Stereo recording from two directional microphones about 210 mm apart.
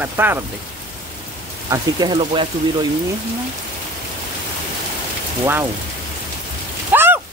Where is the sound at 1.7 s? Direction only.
20° right (ahead or behind).